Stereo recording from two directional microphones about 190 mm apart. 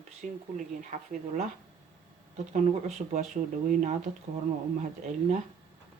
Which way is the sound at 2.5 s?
40° right (ahead or behind).